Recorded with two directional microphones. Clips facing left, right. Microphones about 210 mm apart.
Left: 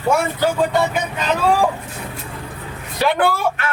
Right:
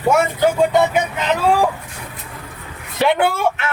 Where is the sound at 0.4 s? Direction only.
20° right (ahead or behind).